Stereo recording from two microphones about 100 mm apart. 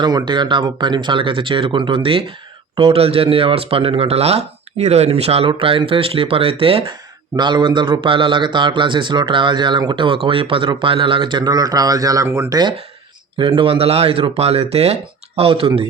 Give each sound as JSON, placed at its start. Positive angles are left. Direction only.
{"t": 0.3, "sound": "speech", "side_deg": -50}
{"t": 2.9, "sound": "speech", "side_deg": -75}
{"t": 5.5, "sound": "speech", "side_deg": -65}
{"t": 7.3, "sound": "a man's voice", "side_deg": -50}
{"t": 12.5, "sound": "a man's voice", "side_deg": -45}
{"t": 13.4, "sound": "speech", "side_deg": -60}
{"t": 15.4, "sound": "speech", "side_deg": -70}